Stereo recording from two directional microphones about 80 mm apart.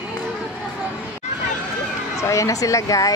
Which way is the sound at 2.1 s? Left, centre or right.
Left.